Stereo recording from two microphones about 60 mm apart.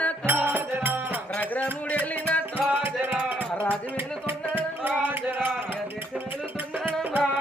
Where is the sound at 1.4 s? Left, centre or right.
Left.